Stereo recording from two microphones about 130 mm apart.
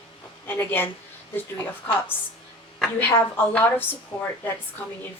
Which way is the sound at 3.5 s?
15° left (ahead or behind).